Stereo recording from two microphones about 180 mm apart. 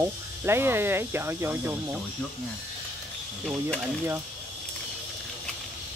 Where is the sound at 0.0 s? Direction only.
15° right (ahead or behind).